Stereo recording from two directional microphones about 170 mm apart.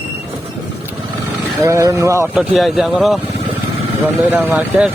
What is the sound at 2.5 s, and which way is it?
Speech, centre (ahead or behind).